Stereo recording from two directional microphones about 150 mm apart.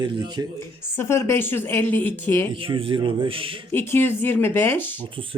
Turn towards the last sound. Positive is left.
turn(degrees=15)  # may be behind; listen again after turning